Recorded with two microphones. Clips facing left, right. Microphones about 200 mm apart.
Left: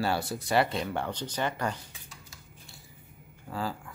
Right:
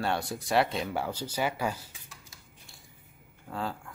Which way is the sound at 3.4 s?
Centre (ahead or behind).